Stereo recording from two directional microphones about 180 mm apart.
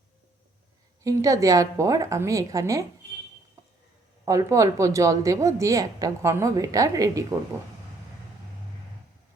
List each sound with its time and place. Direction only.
1.0 s a woman's voice: 20° right (ahead or behind)
4.3 s a woman's voice: 15° right (ahead or behind)